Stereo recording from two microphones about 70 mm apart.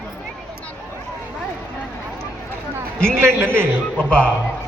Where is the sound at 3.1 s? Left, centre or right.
Right.